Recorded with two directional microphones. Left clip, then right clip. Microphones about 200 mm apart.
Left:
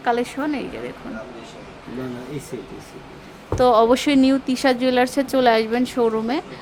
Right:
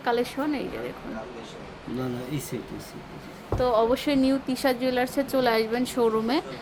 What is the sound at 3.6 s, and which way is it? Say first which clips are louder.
Speech: left 8 dB; 30° left (ahead or behind).